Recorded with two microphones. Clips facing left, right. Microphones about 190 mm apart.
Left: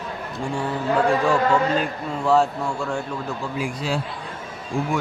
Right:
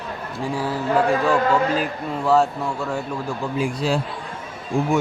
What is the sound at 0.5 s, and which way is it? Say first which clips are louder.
A man's voice: right 1 dB; 5° right (ahead or behind).